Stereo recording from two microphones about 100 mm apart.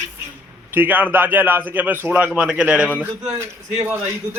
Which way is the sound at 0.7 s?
20° right (ahead or behind).